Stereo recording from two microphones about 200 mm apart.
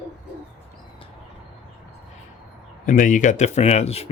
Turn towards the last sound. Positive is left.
turn(degrees=30)  # may be behind; listen again after turning